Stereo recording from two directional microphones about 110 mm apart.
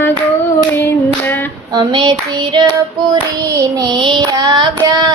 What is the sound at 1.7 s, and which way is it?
Child singing, 40° right (ahead or behind).